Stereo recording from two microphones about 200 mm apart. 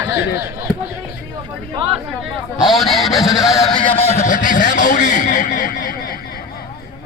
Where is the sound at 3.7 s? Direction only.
25° left (ahead or behind).